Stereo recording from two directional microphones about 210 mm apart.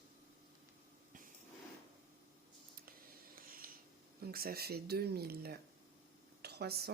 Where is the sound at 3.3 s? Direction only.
45° right (ahead or behind).